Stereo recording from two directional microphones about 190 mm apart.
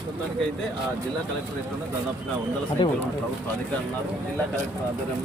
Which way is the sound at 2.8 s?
25° left (ahead or behind).